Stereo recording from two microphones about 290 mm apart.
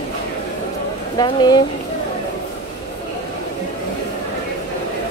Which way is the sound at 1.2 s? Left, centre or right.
Centre.